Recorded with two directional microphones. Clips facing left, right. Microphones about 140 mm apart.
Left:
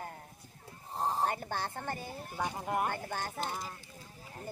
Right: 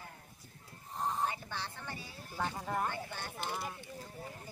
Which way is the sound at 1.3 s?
50° left (ahead or behind).